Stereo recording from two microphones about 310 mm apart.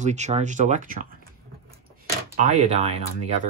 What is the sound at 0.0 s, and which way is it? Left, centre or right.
Speech, right.